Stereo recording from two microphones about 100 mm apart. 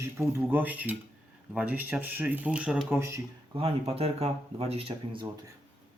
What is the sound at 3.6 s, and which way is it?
Speech, 75° right (ahead or behind).